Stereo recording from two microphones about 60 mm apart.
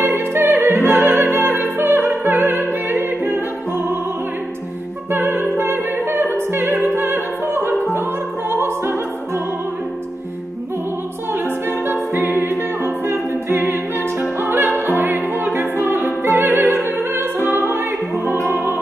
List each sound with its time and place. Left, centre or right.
0.0 s opera: right
5.1 s opera: right
11.3 s music: right
14.4 s opera: right
18.4 s music: right